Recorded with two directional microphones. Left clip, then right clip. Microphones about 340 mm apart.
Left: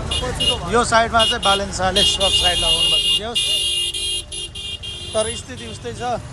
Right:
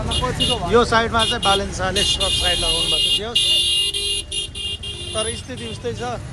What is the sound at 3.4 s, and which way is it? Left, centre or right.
Vehicle, centre.